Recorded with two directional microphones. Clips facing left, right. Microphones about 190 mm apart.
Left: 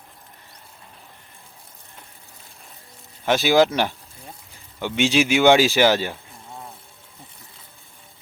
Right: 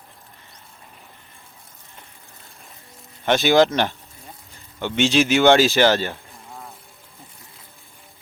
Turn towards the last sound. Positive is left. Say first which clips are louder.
# left 1 dB
turn(degrees=0)  # may be behind; listen again after turning